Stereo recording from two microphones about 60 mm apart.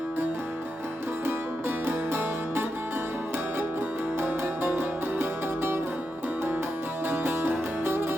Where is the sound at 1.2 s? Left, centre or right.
Right.